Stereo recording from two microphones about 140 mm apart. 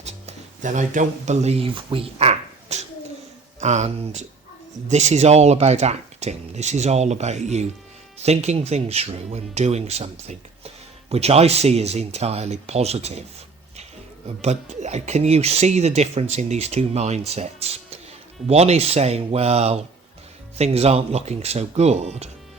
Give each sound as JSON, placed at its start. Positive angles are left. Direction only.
{"t": 0.0, "sound": "music", "side_deg": -55}
{"t": 3.6, "sound": "speech", "side_deg": -55}
{"t": 14.4, "sound": "speech", "side_deg": -55}